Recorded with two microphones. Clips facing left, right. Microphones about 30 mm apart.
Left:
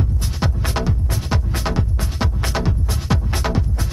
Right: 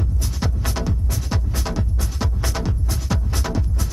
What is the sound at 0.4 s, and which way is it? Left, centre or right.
Music, left.